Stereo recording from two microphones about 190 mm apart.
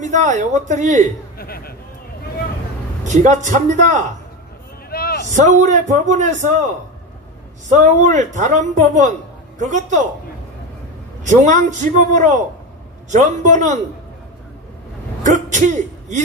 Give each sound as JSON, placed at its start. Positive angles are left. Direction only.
{"t": 0.0, "sound": "speech", "side_deg": -40}
{"t": 1.4, "sound": "a sound", "side_deg": 50}
{"t": 3.0, "sound": "speech", "side_deg": -40}
{"t": 4.8, "sound": "a sound", "side_deg": 55}
{"t": 5.3, "sound": "speech", "side_deg": -40}
{"t": 11.2, "sound": "speech", "side_deg": -40}
{"t": 15.2, "sound": "a man's voice", "side_deg": -40}